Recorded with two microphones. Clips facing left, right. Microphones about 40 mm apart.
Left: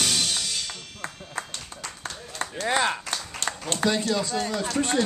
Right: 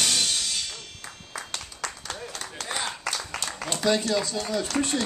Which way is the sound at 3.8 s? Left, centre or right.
Left.